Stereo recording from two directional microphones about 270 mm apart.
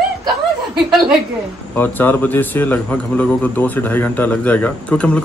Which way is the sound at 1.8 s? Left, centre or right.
Centre.